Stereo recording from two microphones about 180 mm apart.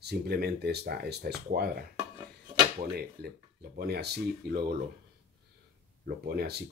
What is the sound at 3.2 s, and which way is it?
Speech, 65° right (ahead or behind).